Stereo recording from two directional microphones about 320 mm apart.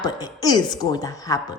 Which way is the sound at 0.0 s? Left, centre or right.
Centre.